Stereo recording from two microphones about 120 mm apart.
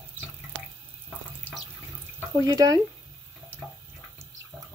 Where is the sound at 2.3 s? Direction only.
30° right (ahead or behind).